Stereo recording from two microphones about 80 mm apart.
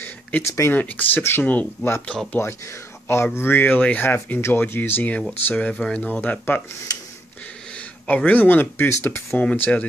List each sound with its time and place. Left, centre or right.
0.0 s a sound: left
0.5 s speech: left
0.7 s speech: left
2.4 s speech: left
3.3 s speech: left
8.3 s speech: left
9.4 s speech: centre